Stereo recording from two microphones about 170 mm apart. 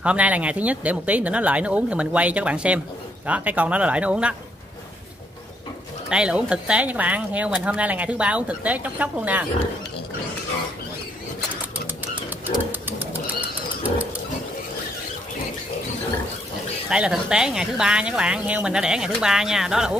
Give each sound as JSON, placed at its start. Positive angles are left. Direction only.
{"t": 0.0, "sound": "speech", "side_deg": -10}
{"t": 6.0, "sound": "speech", "side_deg": -5}
{"t": 12.2, "sound": "bird", "side_deg": -10}
{"t": 16.9, "sound": "speech", "side_deg": -5}